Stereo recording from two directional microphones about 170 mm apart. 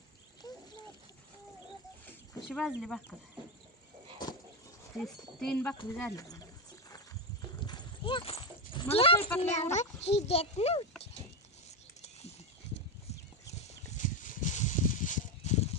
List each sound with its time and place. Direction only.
2.5 s speech: centre (ahead or behind)
4.9 s speech: 5° left (ahead or behind)
6.0 s speech: 20° left (ahead or behind)
7.6 s clip-clop: 25° left (ahead or behind)
9.4 s speech: 40° left (ahead or behind)
13.5 s a sound: 45° left (ahead or behind)